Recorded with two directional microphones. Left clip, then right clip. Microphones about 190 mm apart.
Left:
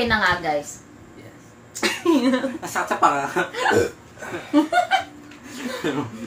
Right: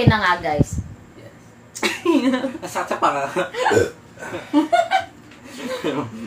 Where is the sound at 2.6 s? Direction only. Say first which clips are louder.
Left 1 dB; 15° left (ahead or behind).